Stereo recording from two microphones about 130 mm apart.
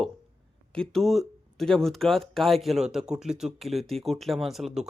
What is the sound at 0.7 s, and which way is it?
Speech, 5° left (ahead or behind).